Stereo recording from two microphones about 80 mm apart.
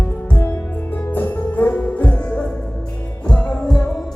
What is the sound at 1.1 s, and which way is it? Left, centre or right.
Music, left.